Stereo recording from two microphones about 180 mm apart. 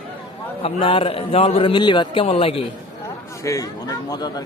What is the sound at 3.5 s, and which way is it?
Speech, 20° left (ahead or behind).